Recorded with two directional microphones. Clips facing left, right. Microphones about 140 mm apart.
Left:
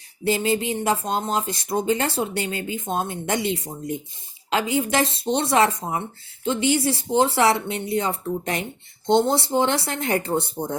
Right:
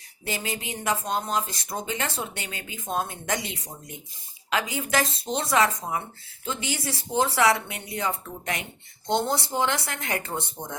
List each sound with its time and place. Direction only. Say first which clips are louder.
0.3 s speech: left 10 dB; 30° left (ahead or behind)